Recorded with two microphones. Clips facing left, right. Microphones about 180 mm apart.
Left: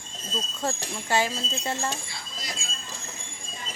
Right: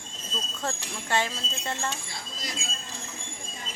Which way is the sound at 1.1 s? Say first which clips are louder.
Left 3 dB; 10° left (ahead or behind).